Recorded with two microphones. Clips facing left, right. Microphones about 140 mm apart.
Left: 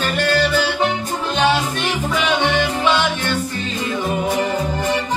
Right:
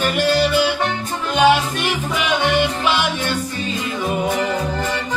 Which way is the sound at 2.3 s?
10° right (ahead or behind).